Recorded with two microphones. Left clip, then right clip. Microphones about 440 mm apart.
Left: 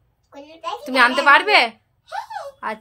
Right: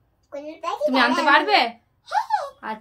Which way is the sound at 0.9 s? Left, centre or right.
Centre.